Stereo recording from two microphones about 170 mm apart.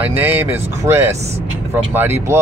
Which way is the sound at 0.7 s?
15° right (ahead or behind).